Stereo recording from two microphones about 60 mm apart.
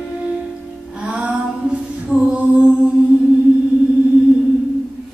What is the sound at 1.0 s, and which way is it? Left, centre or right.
Music, right.